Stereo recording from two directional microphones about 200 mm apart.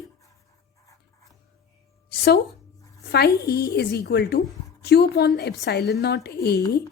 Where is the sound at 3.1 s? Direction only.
55° left (ahead or behind).